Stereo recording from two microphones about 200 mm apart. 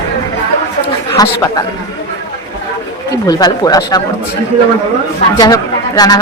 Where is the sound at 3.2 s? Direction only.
20° left (ahead or behind).